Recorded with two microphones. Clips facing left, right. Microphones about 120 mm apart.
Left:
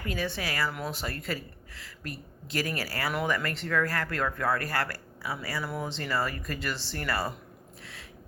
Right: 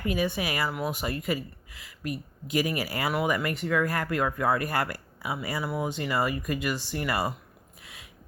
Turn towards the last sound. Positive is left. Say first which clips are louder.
# right 3 dB
turn(degrees=-15)  # may be behind; listen again after turning